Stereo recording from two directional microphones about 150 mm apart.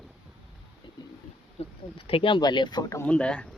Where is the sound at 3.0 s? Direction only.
5° left (ahead or behind).